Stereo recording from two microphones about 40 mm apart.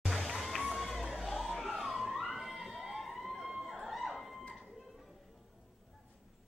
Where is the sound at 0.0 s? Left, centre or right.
Centre.